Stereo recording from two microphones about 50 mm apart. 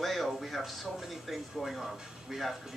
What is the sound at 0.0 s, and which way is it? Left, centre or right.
Speech, centre.